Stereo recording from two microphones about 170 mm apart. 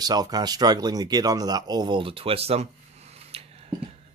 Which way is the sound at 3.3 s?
35° right (ahead or behind).